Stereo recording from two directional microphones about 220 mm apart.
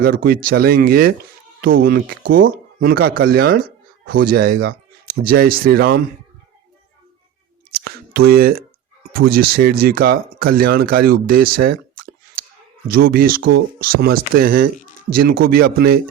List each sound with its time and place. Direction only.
0.4 s speech: 40° right (ahead or behind)
7.7 s a sound: 45° right (ahead or behind)
9.1 s speech: 45° right (ahead or behind)